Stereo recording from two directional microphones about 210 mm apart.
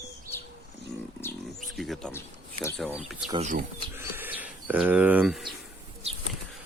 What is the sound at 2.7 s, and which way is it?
Speech, 5° right (ahead or behind).